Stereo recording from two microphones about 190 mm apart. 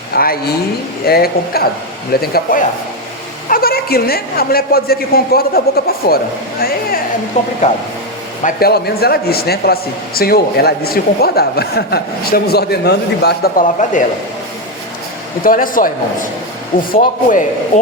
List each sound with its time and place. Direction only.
0.1 s a woman's voice: 55° left (ahead or behind)
7.3 s speech: 40° left (ahead or behind)
8.4 s a man's voice: 55° left (ahead or behind)
15.4 s a woman's voice: 45° left (ahead or behind)
16.9 s a woman's voice: 45° left (ahead or behind)